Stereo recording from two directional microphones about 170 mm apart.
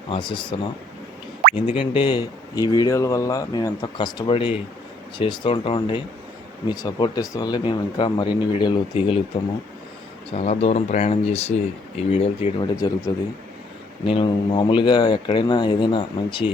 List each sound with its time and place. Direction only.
0.1 s speech: 30° left (ahead or behind)
1.7 s speech: 30° left (ahead or behind)
10.3 s speech: 40° left (ahead or behind)
14.1 s speech: 30° left (ahead or behind)